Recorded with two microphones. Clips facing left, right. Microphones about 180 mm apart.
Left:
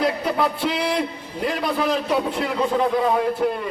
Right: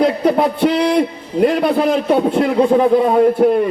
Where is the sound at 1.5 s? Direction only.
55° right (ahead or behind).